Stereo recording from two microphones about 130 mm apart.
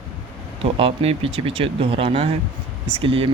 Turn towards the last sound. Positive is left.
turn(degrees=-45)  # may be behind; listen again after turning